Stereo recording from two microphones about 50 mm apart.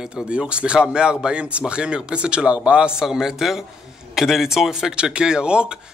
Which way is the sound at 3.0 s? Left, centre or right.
Centre.